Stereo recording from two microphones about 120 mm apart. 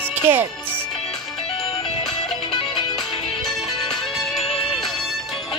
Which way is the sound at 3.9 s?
Centre (ahead or behind).